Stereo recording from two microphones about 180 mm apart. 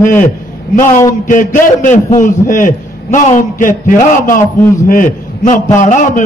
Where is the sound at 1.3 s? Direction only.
45° left (ahead or behind).